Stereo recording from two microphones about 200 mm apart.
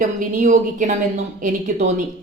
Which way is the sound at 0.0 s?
40° right (ahead or behind).